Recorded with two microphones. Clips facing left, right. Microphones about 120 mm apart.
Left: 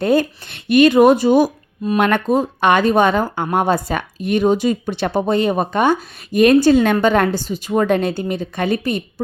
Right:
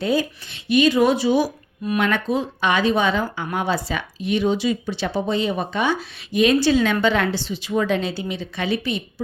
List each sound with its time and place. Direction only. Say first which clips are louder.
0.0 s speech: left 6 dB; 55° left (ahead or behind)